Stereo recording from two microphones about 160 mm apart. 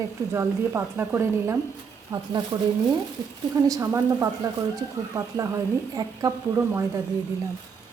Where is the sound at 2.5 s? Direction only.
30° right (ahead or behind).